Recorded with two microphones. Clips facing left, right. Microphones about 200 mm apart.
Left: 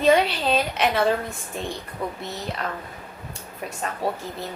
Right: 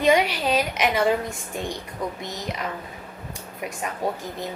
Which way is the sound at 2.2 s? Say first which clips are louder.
Even; 15° right (ahead or behind).